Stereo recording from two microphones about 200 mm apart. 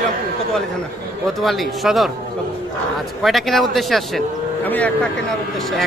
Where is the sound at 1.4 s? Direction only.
Centre (ahead or behind).